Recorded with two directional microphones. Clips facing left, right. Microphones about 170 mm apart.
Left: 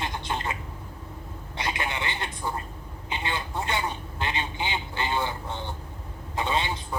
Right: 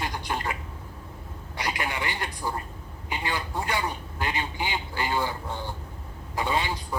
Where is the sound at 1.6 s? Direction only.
25° left (ahead or behind).